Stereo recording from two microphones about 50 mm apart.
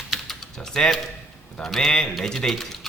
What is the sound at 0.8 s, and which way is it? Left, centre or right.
Speech, centre.